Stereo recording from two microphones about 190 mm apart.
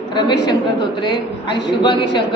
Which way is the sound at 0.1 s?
25° left (ahead or behind).